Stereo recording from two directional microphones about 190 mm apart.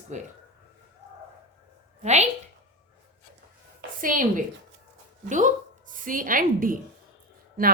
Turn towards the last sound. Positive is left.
turn(degrees=-50)  # may be behind; listen again after turning